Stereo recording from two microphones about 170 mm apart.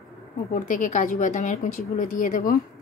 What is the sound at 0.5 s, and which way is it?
A woman's voice, 50° left (ahead or behind).